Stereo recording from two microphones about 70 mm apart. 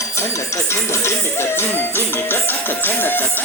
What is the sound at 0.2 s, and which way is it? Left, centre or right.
Speech, left.